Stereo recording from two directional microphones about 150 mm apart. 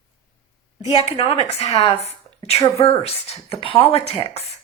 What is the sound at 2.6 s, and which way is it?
Speech, 20° left (ahead or behind).